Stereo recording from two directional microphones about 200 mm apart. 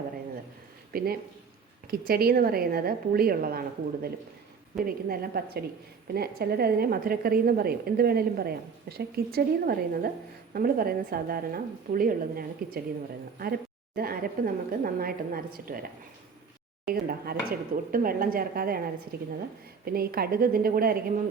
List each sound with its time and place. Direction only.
0.9 s a woman's voice: 50° right (ahead or behind)
13.9 s a woman's voice: 50° right (ahead or behind)